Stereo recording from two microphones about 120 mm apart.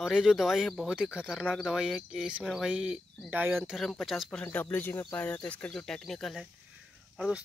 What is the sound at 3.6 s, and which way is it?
Speech, centre (ahead or behind).